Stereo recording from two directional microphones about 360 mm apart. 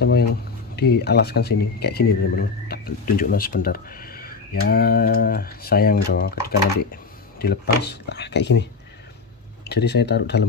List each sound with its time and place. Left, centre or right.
0.0 s speech: left
9.7 s speech: left